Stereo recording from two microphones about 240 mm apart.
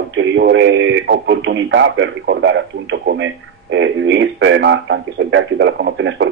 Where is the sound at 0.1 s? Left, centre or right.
Right.